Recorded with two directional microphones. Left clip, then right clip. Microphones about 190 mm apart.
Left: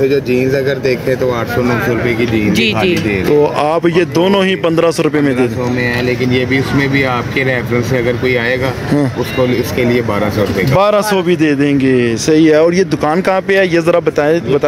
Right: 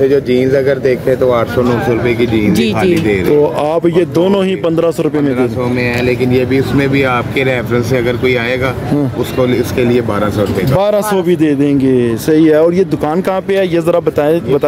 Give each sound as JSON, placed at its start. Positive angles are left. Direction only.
{"t": 0.1, "sound": "speech", "side_deg": 25}
{"t": 2.5, "sound": "speech", "side_deg": -50}
{"t": 3.6, "sound": "speech", "side_deg": -5}
{"t": 6.0, "sound": "speech", "side_deg": 20}
{"t": 9.4, "sound": "speech", "side_deg": 20}
{"t": 10.8, "sound": "speech", "side_deg": -10}